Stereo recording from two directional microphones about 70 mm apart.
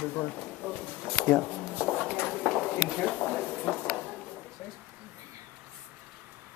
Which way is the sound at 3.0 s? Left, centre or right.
Centre.